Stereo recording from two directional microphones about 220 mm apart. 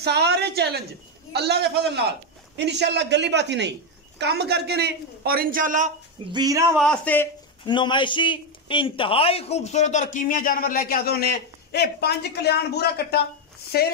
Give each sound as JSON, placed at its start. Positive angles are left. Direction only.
{"t": 0.0, "sound": "a man's voice", "side_deg": -50}
{"t": 6.3, "sound": "speech", "side_deg": -15}
{"t": 6.8, "sound": "a man's voice", "side_deg": 5}
{"t": 7.6, "sound": "a man's voice", "side_deg": 20}